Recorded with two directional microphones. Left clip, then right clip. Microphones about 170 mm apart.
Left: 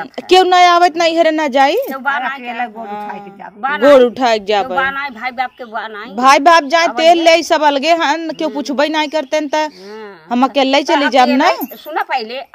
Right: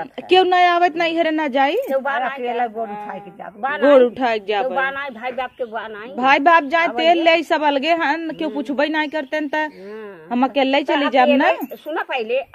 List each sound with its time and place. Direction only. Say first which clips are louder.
0.3 s a woman's voice: left 6 dB; 45° left (ahead or behind)
1.9 s speech: left 2 dB; 5° right (ahead or behind)
3.9 s a woman's voice: left 4 dB; 50° left (ahead or behind)
4.7 s speech: left 5 dB; 5° right (ahead or behind)
6.1 s a woman's voice: left 5 dB; 50° left (ahead or behind)
11.9 s speech: left 3 dB; 5° right (ahead or behind)